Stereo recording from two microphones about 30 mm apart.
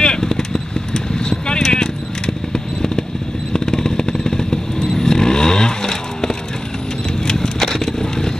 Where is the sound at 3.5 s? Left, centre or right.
Centre.